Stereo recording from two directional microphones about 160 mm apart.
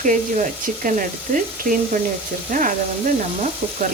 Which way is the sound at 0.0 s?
50° right (ahead or behind).